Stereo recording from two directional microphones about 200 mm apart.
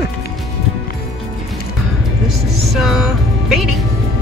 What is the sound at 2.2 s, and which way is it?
Music, centre (ahead or behind).